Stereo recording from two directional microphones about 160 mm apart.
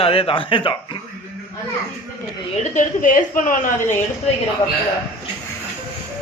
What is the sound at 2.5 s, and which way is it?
A woman's voice, 55° left (ahead or behind).